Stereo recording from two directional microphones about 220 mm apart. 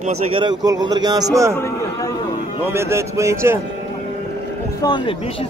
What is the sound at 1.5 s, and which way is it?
Speech, 10° left (ahead or behind).